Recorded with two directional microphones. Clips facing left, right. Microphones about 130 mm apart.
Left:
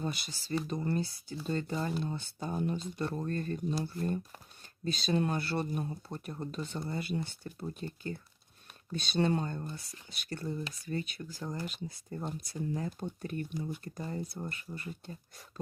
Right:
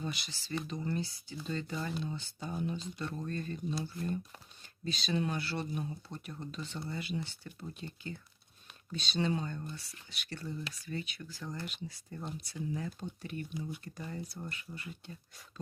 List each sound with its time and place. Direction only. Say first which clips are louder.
0.0 s speech: left 3 dB; 45° left (ahead or behind)